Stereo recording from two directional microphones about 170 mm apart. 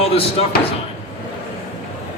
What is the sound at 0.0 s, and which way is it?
Speech, 35° left (ahead or behind).